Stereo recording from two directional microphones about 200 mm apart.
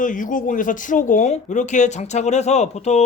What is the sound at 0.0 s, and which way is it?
Speech, 40° left (ahead or behind).